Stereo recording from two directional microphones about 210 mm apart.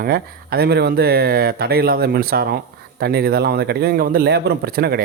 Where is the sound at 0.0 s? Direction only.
45° right (ahead or behind).